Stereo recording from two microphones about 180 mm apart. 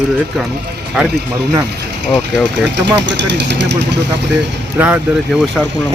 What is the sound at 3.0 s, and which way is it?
Speech, 75° right (ahead or behind).